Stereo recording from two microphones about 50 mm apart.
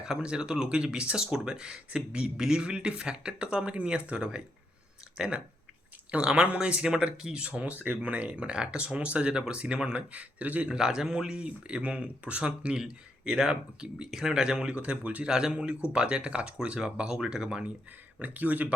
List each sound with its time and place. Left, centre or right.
0.0 s speech: centre
6.1 s speech: right
10.7 s speech: centre
18.2 s speech: right